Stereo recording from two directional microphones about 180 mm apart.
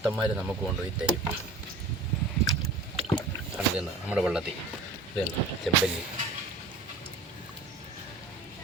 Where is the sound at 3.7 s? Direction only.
5° right (ahead or behind).